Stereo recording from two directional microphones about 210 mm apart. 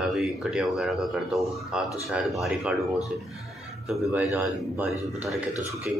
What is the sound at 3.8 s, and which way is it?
A man's voice, 5° right (ahead or behind).